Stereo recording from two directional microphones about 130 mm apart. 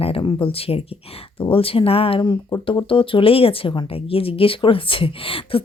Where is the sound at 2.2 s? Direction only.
30° left (ahead or behind).